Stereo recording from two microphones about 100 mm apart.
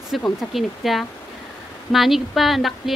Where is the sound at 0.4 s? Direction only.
Centre (ahead or behind).